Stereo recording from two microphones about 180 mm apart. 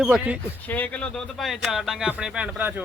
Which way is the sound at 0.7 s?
10° left (ahead or behind).